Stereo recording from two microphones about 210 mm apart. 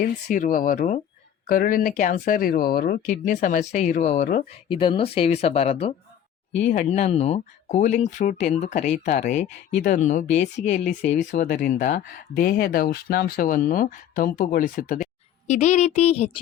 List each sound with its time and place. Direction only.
0.0 s speech: 40° left (ahead or behind)
4.7 s speech: 25° left (ahead or behind)